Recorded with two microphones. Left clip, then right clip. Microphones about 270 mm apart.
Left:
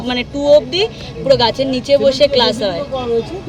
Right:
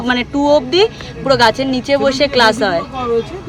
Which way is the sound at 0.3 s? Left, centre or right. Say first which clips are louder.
Left 1 dB; centre.